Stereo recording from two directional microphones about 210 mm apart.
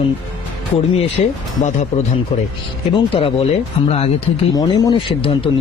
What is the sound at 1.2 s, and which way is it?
Speech, 30° left (ahead or behind).